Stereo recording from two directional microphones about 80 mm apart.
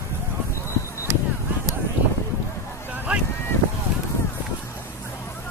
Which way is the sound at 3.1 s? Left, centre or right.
Centre.